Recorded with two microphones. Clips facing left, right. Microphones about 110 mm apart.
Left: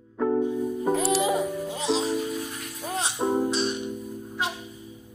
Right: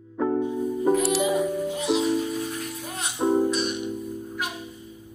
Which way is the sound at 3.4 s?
30° left (ahead or behind).